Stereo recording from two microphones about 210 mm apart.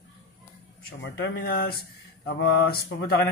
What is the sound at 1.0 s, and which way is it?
Speech, 55° left (ahead or behind).